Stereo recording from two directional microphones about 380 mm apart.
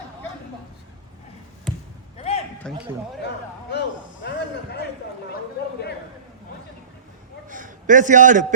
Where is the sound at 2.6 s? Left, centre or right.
Centre.